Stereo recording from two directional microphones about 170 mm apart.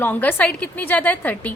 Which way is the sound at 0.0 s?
10° left (ahead or behind).